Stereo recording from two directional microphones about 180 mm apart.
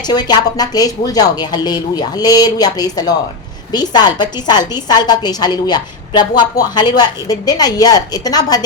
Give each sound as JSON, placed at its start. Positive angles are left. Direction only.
{"t": 0.1, "sound": "a woman's voice", "side_deg": 25}